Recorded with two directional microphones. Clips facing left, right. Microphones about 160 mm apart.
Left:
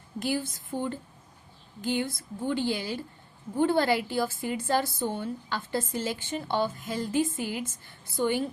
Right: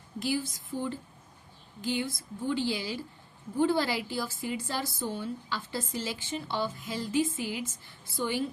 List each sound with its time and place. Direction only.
0.2 s a woman's voice: 55° left (ahead or behind)